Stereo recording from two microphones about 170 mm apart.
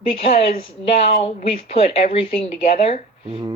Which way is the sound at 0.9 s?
35° left (ahead or behind).